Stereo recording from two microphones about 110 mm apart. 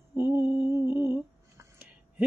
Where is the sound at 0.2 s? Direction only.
20° right (ahead or behind).